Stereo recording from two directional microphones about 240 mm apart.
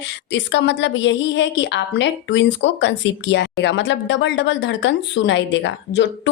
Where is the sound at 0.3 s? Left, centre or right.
Left.